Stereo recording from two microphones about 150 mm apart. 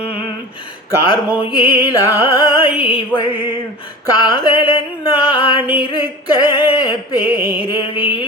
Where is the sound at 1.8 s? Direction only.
25° left (ahead or behind).